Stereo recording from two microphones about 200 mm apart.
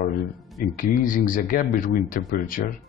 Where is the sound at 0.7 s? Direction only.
45° left (ahead or behind).